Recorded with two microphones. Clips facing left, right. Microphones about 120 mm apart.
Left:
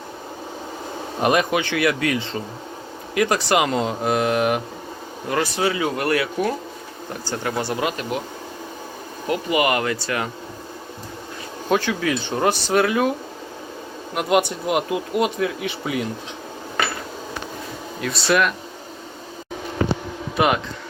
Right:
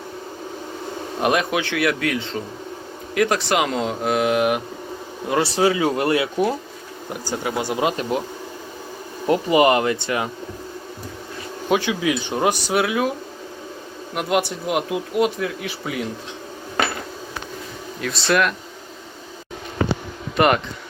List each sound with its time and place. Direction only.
1.2 s speech: centre (ahead or behind)
5.3 s speech: 30° right (ahead or behind)
9.2 s speech: 30° right (ahead or behind)
11.7 s speech: 10° right (ahead or behind)
14.2 s speech: centre (ahead or behind)
18.0 s speech: centre (ahead or behind)
20.3 s speech: 5° left (ahead or behind)